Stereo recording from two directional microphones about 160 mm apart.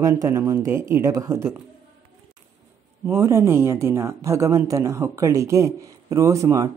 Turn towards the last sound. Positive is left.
turn(degrees=-20)  # may be behind; listen again after turning